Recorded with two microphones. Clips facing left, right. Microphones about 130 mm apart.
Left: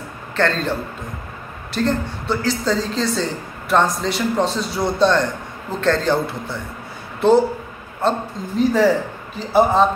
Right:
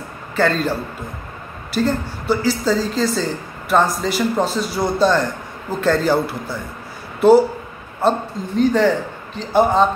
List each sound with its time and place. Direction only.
0.4 s a woman's voice: 5° right (ahead or behind)
8.5 s a woman's voice: 5° left (ahead or behind)